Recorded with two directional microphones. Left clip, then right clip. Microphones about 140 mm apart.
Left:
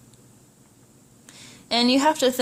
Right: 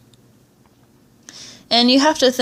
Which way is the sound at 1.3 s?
30° right (ahead or behind).